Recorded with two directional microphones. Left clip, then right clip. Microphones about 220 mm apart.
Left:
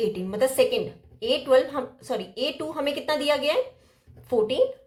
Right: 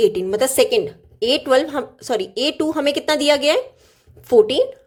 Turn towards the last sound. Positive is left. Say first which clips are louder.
# right 8 dB
turn(degrees=-45)  # may be behind; listen again after turning